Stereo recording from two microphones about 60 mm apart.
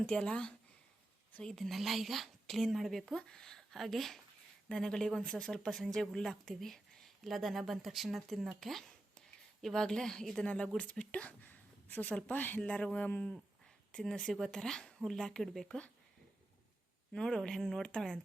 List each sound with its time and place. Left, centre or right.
0.0 s speech: centre
1.5 s speech: centre
10.4 s speech: left
13.9 s speech: centre
17.1 s speech: centre
17.8 s speech: centre